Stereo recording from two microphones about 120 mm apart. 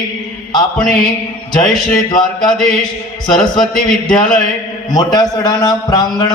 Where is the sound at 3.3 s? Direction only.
35° left (ahead or behind).